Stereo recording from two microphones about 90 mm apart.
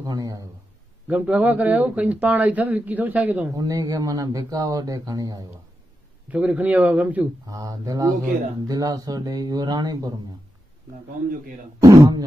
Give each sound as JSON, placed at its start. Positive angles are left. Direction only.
{"t": 0.0, "sound": "speech", "side_deg": -40}
{"t": 1.0, "sound": "speech", "side_deg": -15}
{"t": 3.5, "sound": "speech", "side_deg": -40}
{"t": 6.3, "sound": "a man's voice", "side_deg": -15}
{"t": 7.4, "sound": "speech", "side_deg": -40}
{"t": 11.8, "sound": "speech", "side_deg": -45}